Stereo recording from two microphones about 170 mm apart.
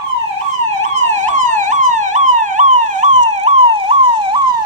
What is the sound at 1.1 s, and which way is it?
Police car, 45° right (ahead or behind).